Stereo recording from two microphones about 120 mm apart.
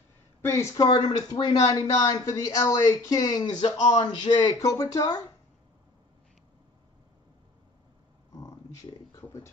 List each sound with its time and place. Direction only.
0.4 s a woman's voice: 25° left (ahead or behind)
0.8 s speech: 35° left (ahead or behind)
8.3 s a sound: 30° left (ahead or behind)